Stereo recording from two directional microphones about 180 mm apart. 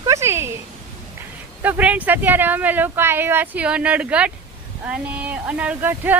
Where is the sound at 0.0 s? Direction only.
15° right (ahead or behind).